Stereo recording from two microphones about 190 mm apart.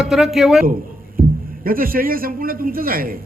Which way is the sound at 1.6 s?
50° right (ahead or behind).